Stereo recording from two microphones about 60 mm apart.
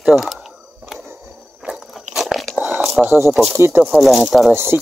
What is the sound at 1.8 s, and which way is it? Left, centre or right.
Crunch, centre.